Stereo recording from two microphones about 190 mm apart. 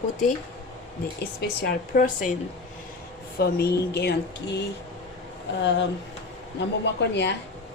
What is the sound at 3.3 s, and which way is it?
Speech, 55° left (ahead or behind).